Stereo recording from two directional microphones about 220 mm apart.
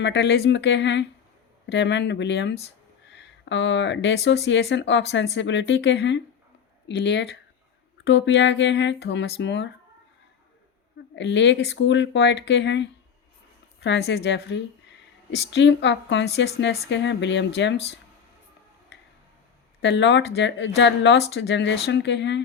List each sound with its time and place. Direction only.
0.0 s speech: 50° left (ahead or behind)
11.1 s speech: 55° left (ahead or behind)
19.8 s speech: 55° left (ahead or behind)